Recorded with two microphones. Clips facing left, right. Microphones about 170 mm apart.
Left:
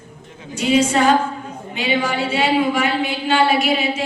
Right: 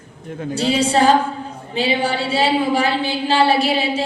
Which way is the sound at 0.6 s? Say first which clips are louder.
Left 1 dB; 35° right (ahead or behind).